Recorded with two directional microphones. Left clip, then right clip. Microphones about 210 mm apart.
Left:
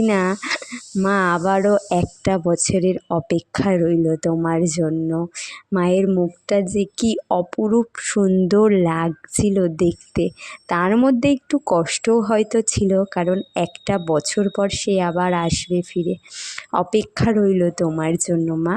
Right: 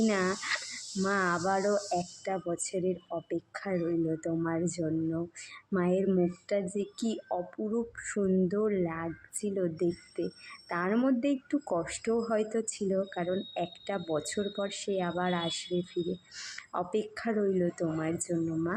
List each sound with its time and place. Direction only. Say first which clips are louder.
0.0 s speech: left 10 dB; 45° left (ahead or behind)